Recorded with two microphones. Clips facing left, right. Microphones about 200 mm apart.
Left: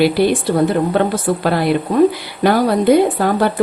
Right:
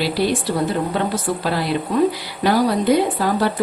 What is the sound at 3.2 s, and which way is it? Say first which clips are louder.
Speech: left 4 dB; 55° left (ahead or behind).